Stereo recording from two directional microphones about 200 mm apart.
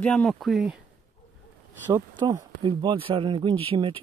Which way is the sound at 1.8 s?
15° right (ahead or behind).